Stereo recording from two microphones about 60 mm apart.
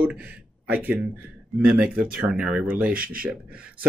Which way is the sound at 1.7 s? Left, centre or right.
Centre.